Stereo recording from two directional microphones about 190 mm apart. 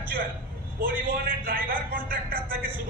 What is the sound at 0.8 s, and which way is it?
A man's voice, 50° right (ahead or behind).